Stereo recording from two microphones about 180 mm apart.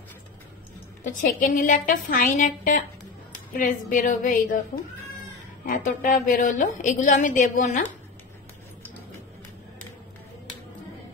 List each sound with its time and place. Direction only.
1.0 s a woman's voice: 45° left (ahead or behind)
5.7 s a woman's voice: 45° left (ahead or behind)